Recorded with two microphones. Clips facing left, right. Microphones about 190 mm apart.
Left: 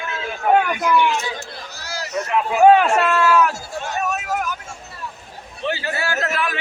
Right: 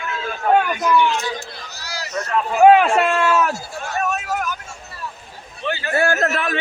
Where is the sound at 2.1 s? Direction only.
10° left (ahead or behind).